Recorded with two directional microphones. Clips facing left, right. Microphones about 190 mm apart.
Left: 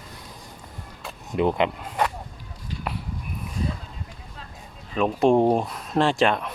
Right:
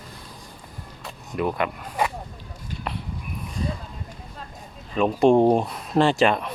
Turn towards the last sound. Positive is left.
turn(degrees=0)  # may be behind; listen again after turning